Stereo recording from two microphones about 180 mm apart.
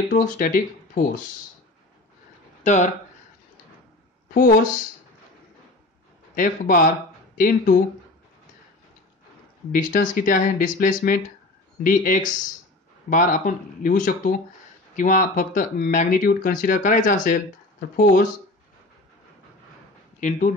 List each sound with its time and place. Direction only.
0.1 s speech: 50° left (ahead or behind)
2.6 s speech: 40° left (ahead or behind)
6.3 s speech: 50° left (ahead or behind)
9.7 s speech: 50° left (ahead or behind)
20.2 s speech: 45° left (ahead or behind)